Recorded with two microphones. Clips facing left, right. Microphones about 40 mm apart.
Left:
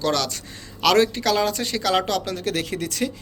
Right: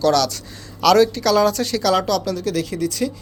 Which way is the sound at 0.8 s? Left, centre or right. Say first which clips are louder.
Right 4 dB; left.